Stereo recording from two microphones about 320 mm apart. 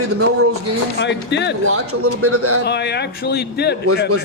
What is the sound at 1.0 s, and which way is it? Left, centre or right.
Speech, left.